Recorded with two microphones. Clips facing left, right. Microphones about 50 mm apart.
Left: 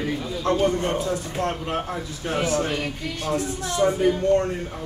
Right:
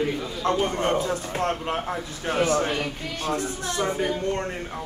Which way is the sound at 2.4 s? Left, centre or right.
Right.